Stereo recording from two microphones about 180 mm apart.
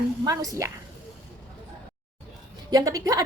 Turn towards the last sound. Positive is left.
turn(degrees=-20)  # may be behind; listen again after turning